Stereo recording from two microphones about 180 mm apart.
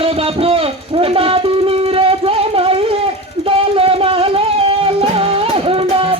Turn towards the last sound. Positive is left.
turn(degrees=-30)  # may be behind; listen again after turning